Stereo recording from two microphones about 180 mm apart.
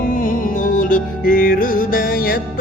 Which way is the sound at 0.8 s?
50° left (ahead or behind).